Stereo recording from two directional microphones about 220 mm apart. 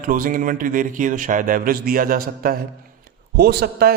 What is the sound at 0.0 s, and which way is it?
A man's voice, 40° right (ahead or behind).